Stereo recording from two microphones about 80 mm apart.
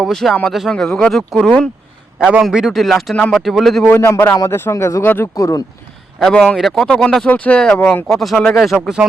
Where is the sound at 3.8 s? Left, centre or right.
Left.